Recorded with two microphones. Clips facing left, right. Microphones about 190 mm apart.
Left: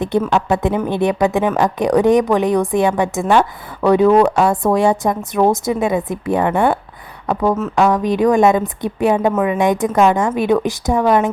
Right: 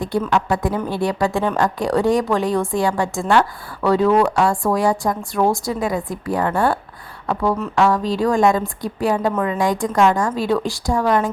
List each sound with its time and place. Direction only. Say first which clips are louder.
0.3 s speech: left 3 dB; 20° left (ahead or behind)
9.3 s a woman's voice: left 4 dB; 10° left (ahead or behind)
9.6 s speech: left 3 dB; 20° left (ahead or behind)